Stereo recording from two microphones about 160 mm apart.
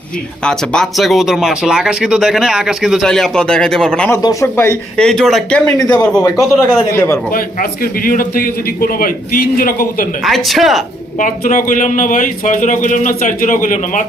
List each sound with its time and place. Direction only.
0.4 s speech: 5° left (ahead or behind)
4.2 s speech: 20° left (ahead or behind)
5.0 s speech: 5° left (ahead or behind)
5.7 s speech: 20° left (ahead or behind)
7.3 s a man's voice: 65° left (ahead or behind)
10.2 s speech: centre (ahead or behind)
11.2 s a man's voice: 50° left (ahead or behind)